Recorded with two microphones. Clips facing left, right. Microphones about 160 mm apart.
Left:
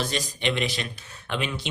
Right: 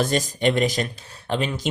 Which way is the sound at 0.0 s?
45° right (ahead or behind).